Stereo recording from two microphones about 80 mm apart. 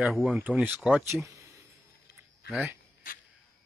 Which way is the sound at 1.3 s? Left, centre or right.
Right.